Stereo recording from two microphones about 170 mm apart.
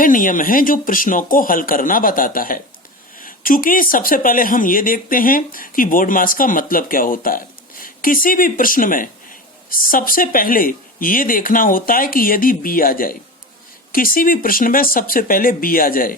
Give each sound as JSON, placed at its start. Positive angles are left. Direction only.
{"t": 0.0, "sound": "speech", "side_deg": 50}